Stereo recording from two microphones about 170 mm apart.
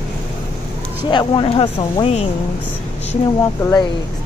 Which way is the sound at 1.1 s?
30° left (ahead or behind).